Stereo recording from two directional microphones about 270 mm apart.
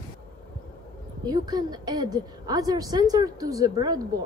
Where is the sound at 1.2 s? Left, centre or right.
Centre.